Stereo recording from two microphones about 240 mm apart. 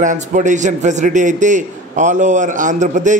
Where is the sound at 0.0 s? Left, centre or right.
Right.